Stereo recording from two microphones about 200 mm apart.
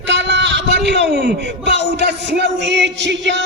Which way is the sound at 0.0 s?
60° right (ahead or behind).